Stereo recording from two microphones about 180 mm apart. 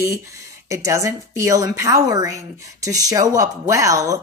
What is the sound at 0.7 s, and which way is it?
A woman's voice, 15° right (ahead or behind).